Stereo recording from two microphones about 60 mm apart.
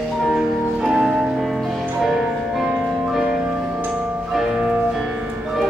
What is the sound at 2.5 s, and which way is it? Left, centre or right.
Music, centre.